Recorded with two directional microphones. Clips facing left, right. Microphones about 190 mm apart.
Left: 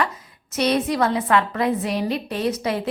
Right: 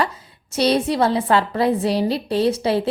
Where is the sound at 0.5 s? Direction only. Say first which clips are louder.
Right 2 dB; 30° right (ahead or behind).